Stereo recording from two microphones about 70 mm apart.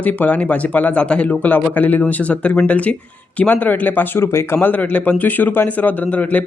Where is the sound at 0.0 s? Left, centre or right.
Left.